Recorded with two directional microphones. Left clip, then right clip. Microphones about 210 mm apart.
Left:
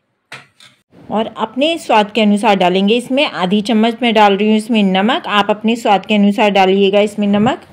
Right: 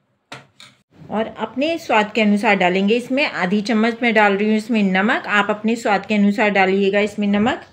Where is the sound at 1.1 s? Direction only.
25° left (ahead or behind).